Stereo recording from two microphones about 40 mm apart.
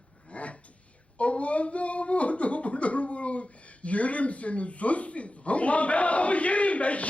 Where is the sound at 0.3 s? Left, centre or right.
Left.